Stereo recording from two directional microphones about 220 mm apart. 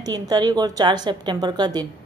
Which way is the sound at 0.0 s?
20° right (ahead or behind).